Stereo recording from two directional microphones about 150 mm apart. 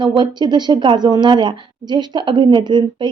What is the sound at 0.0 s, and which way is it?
A woman's voice, 30° right (ahead or behind).